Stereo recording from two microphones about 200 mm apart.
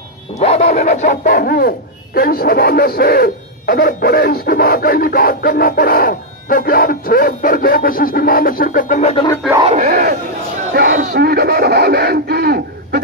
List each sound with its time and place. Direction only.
0.4 s dog: 30° left (ahead or behind); by 1.7 s 50° left (ahead or behind)
2.1 s speech: 50° left (ahead or behind)
9.6 s speech: 35° right (ahead or behind)
9.8 s a sound: 45° right (ahead or behind)